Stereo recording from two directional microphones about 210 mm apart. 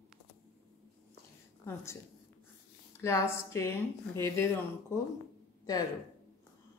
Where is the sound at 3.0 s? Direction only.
15° left (ahead or behind).